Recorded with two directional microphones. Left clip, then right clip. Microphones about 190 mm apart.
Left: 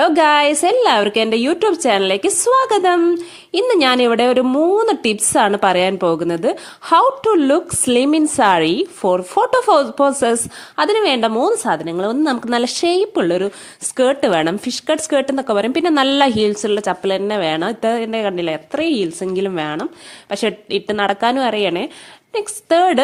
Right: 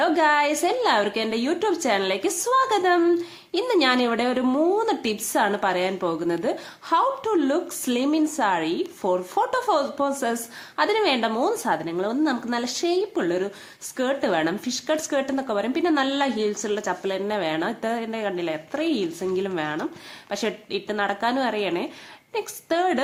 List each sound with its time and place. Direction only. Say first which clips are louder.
0.0 s a woman's voice: left 7 dB; 45° left (ahead or behind)